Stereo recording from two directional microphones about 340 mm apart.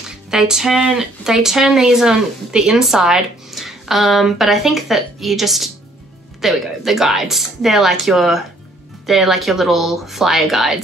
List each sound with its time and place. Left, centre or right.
0.3 s speech: centre